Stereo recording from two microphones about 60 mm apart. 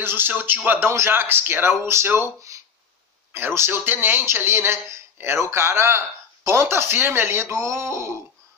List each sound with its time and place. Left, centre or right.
0.0 s speech: right
0.7 s speech: right
3.3 s speech: right